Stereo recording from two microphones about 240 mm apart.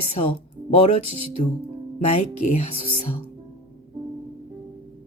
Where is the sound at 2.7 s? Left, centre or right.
Right.